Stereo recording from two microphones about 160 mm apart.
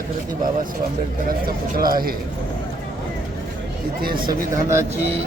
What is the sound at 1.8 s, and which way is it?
Speech, 65° right (ahead or behind).